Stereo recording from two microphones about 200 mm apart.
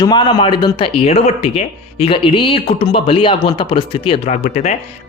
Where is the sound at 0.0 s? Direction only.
20° left (ahead or behind).